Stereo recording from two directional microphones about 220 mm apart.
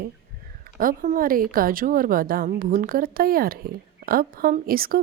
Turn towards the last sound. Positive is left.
turn(degrees=-40)  # may be behind; listen again after turning